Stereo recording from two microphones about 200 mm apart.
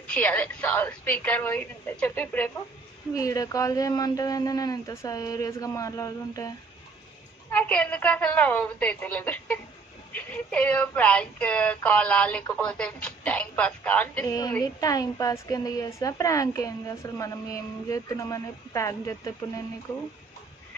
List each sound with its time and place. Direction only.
0.1 s speech: 5° left (ahead or behind)
7.5 s speech: 5° left (ahead or behind)